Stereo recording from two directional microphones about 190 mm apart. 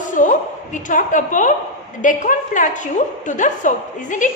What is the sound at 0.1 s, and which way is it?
A woman's voice, 45° left (ahead or behind).